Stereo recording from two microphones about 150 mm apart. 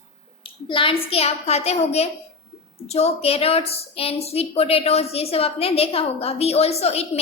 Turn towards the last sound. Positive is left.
turn(degrees=45)  # may be behind; listen again after turning